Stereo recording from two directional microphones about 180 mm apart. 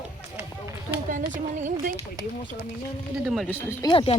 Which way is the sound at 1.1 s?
45° right (ahead or behind).